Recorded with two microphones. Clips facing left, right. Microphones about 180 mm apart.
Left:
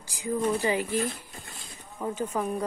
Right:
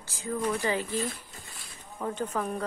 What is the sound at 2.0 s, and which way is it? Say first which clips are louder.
Speech: left 2 dB; 10° left (ahead or behind).